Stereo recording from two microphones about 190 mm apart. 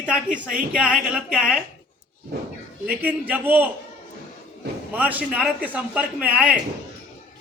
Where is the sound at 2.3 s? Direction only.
55° right (ahead or behind).